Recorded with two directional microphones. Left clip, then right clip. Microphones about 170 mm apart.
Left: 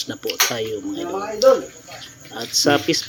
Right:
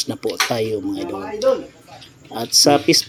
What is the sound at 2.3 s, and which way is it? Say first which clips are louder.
Speech: right 4 dB; 20° right (ahead or behind).